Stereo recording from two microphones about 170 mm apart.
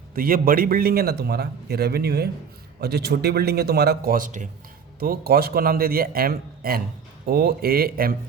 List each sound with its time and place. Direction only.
0.1 s a man's voice: 60° right (ahead or behind)
4.9 s a man's voice: 65° right (ahead or behind)